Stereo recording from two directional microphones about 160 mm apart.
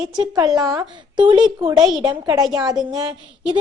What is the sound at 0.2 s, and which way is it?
A woman's voice, 20° right (ahead or behind).